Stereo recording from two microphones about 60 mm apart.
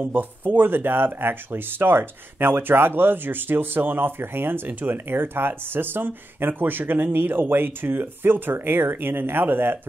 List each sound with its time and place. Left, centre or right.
0.0 s speech: right